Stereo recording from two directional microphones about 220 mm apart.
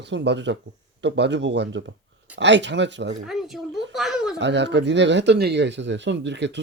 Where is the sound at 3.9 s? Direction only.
Centre (ahead or behind).